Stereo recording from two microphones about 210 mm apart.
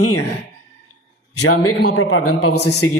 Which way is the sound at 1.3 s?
90° left.